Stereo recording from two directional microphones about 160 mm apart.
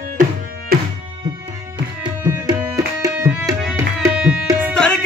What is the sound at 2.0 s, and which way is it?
Tabla, 25° right (ahead or behind).